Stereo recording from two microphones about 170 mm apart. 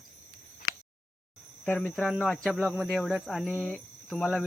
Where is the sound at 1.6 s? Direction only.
5° left (ahead or behind).